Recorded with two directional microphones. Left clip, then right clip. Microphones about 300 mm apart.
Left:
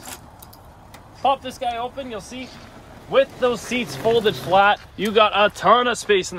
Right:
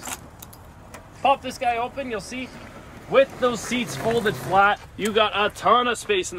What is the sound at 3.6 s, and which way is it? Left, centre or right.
Speech, left.